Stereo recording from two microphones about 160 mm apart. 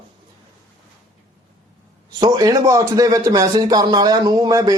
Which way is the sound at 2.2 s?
25° right (ahead or behind).